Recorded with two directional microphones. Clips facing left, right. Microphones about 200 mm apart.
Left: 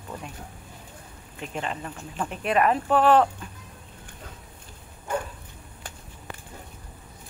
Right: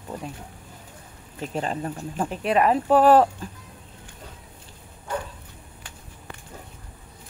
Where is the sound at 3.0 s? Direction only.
40° right (ahead or behind).